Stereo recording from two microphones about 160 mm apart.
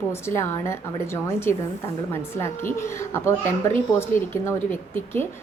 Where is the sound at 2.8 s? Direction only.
15° left (ahead or behind).